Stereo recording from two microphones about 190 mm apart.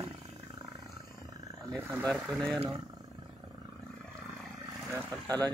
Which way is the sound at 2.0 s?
5° left (ahead or behind).